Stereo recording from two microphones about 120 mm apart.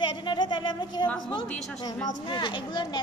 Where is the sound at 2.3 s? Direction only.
40° left (ahead or behind).